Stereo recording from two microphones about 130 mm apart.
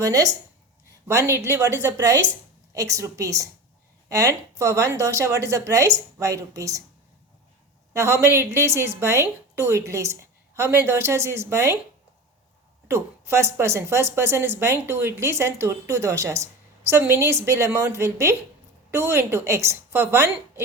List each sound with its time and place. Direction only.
0.0 s a woman's voice: 25° right (ahead or behind)
7.9 s a woman's voice: 20° right (ahead or behind)
12.9 s a woman's voice: 20° right (ahead or behind)